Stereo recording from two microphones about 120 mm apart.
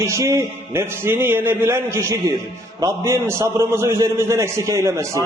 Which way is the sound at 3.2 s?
25° right (ahead or behind).